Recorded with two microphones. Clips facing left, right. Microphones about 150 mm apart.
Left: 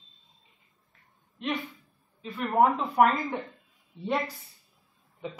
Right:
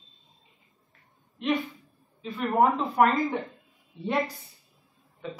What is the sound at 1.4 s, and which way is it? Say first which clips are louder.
Speech: right 5 dB; centre (ahead or behind).